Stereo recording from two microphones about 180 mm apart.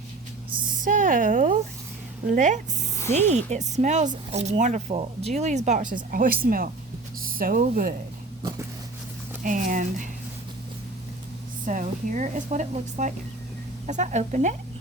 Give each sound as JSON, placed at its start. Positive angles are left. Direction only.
{"t": 0.8, "sound": "a sound", "side_deg": -45}
{"t": 2.2, "sound": "speech", "side_deg": -45}
{"t": 9.4, "sound": "speech", "side_deg": -45}
{"t": 11.6, "sound": "speech", "side_deg": -45}